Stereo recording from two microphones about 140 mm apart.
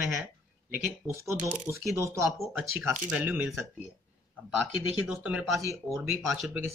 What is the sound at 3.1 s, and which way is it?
Speech, 10° right (ahead or behind).